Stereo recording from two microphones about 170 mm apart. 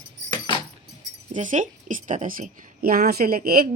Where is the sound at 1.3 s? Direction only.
50° right (ahead or behind).